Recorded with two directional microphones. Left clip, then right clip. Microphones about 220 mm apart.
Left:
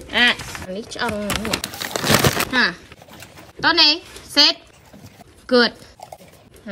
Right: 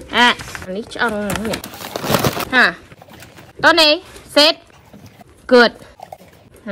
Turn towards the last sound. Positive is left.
turn(degrees=15)  # may be behind; listen again after turning